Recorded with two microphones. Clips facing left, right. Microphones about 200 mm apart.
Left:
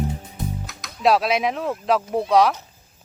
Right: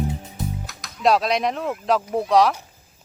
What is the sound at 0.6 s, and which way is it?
Speech, centre (ahead or behind).